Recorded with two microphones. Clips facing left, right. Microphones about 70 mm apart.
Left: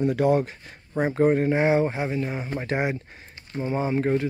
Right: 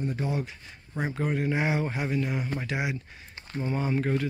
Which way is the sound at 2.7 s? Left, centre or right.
Left.